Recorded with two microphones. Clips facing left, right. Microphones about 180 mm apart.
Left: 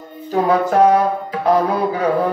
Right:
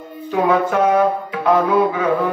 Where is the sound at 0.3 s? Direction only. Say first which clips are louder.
Left 1 dB; 35° left (ahead or behind).